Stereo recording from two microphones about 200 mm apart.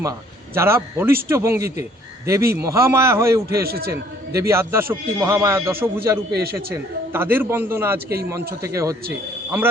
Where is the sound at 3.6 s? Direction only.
50° right (ahead or behind).